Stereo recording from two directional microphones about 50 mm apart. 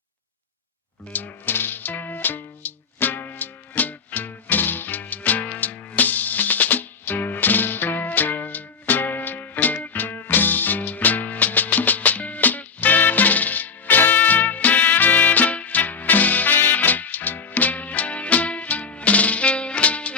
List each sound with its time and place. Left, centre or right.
1.1 s music: left